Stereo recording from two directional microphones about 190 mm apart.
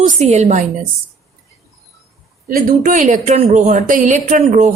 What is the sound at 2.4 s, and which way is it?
A woman's voice, 45° right (ahead or behind).